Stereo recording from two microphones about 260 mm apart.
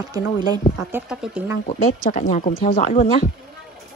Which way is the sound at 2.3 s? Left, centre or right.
Left.